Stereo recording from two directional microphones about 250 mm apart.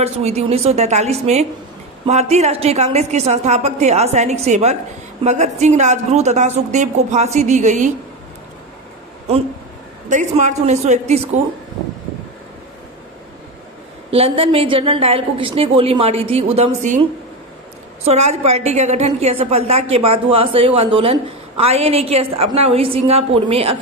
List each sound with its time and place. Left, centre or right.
0.0 s a woman's voice: right
10.0 s a woman's voice: right
14.1 s a woman's voice: right